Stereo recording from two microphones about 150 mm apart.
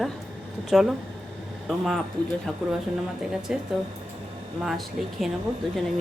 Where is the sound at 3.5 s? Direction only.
5° right (ahead or behind).